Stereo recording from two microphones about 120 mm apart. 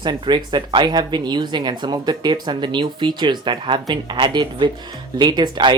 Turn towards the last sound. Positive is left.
turn(degrees=-40)  # may be behind; listen again after turning